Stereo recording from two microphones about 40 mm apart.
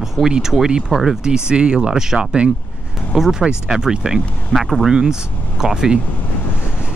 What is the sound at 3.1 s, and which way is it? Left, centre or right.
Speech, centre.